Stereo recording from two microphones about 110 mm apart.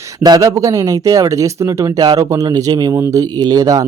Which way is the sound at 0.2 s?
30° right (ahead or behind).